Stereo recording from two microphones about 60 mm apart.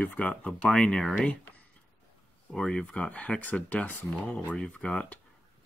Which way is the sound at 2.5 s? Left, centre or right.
Centre.